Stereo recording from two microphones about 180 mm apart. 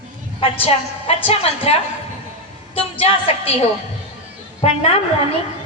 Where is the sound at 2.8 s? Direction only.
35° left (ahead or behind).